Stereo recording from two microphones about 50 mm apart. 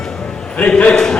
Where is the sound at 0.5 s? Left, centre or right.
Left.